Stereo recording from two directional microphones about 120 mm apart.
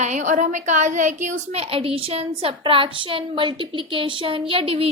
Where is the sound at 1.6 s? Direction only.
50° right (ahead or behind).